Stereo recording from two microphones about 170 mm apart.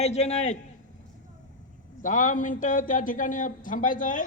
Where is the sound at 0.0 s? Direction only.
40° left (ahead or behind).